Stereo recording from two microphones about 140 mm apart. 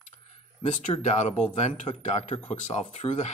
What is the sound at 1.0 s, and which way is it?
Speech, 55° left (ahead or behind).